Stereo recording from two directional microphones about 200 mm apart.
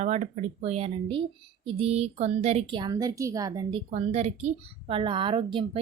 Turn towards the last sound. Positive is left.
turn(degrees=-25)  # may be behind; listen again after turning